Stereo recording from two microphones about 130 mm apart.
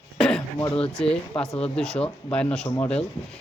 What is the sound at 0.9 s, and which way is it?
Speech, 5° left (ahead or behind).